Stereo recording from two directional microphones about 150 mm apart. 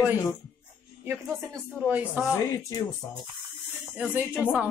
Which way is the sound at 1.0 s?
20° right (ahead or behind).